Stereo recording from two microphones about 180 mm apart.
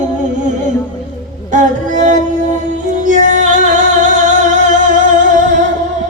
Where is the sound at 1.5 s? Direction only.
45° right (ahead or behind).